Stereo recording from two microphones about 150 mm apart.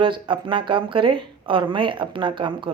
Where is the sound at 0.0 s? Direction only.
35° right (ahead or behind).